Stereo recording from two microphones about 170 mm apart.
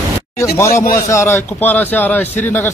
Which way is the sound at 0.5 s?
15° left (ahead or behind).